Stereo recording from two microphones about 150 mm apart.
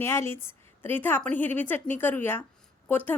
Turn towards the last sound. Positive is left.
turn(degrees=15)  # may be behind; listen again after turning